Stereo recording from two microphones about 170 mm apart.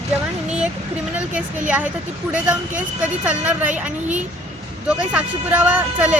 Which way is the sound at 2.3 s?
5° right (ahead or behind).